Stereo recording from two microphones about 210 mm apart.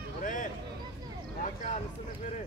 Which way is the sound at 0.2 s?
40° left (ahead or behind).